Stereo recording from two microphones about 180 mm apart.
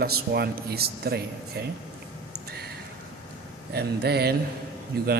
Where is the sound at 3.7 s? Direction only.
65° right (ahead or behind).